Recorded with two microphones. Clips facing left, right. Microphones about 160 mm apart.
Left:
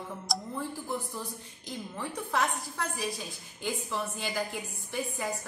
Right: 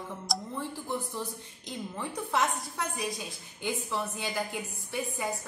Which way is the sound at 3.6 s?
Centre (ahead or behind).